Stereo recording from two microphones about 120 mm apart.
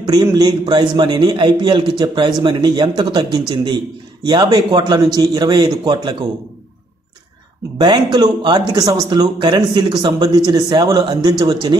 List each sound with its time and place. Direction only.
0.0 s speech: 35° right (ahead or behind)
7.8 s speech: 40° right (ahead or behind)